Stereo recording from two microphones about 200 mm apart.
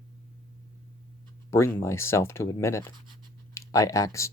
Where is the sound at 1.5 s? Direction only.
15° left (ahead or behind).